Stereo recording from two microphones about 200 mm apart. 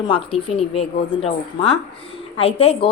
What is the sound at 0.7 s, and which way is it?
Speech, 30° left (ahead or behind).